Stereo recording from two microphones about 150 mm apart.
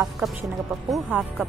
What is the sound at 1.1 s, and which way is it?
Speech, 10° right (ahead or behind).